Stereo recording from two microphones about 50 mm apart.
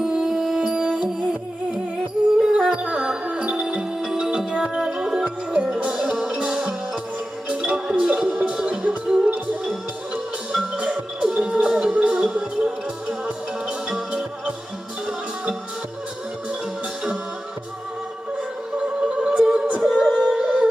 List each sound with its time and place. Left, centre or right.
0.0 s music: centre
2.4 s music: centre
10.8 s music: centre
18.3 s music: right
19.4 s music: centre